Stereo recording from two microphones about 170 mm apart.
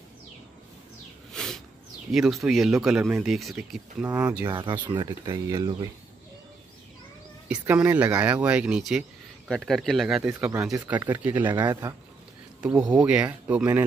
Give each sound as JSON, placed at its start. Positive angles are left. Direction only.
{"t": 1.3, "sound": "a sound", "side_deg": 5}
{"t": 2.1, "sound": "speech", "side_deg": -5}
{"t": 4.5, "sound": "speech", "side_deg": -25}
{"t": 7.4, "sound": "speech", "side_deg": -10}
{"t": 10.4, "sound": "speech", "side_deg": -15}
{"t": 12.9, "sound": "speech", "side_deg": -5}